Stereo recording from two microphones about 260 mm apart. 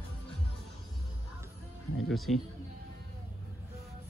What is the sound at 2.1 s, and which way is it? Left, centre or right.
Music, centre.